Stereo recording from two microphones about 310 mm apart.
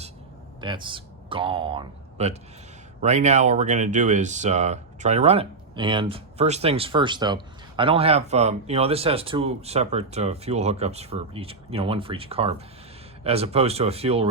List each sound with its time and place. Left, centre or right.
0.6 s speech: centre